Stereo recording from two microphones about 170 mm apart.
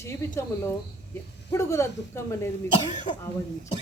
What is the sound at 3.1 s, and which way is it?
Speech, 45° left (ahead or behind).